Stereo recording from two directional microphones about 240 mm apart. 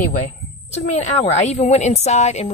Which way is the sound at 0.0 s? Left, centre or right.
Left.